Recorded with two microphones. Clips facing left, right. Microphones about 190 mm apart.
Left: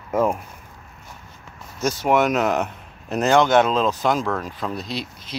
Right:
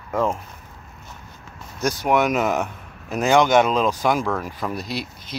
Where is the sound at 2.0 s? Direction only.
Centre (ahead or behind).